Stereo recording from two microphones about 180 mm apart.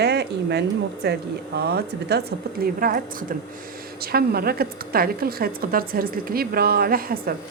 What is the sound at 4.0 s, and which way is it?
Speech, 60° right (ahead or behind).